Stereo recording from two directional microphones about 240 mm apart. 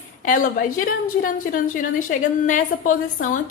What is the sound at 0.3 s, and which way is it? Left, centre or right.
Speech, left.